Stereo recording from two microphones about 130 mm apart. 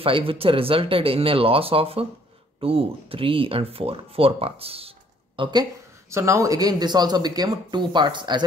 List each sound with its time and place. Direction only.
0.0 s speech: 45° right (ahead or behind)